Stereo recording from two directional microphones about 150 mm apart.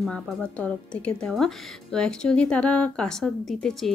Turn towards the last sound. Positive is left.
turn(degrees=0)  # may be behind; listen again after turning